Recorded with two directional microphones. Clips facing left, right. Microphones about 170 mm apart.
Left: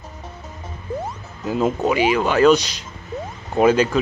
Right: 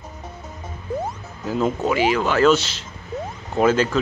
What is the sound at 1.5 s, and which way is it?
Speech, 15° left (ahead or behind).